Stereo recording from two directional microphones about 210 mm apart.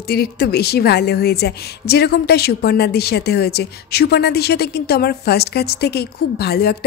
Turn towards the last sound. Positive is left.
turn(degrees=50)  # may be behind; listen again after turning